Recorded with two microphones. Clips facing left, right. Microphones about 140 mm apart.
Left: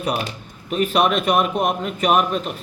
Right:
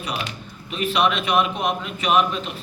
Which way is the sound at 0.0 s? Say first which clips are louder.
Left 5 dB; 50° left (ahead or behind).